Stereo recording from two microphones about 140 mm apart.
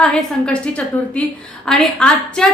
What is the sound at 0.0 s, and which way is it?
Speech, 5° left (ahead or behind).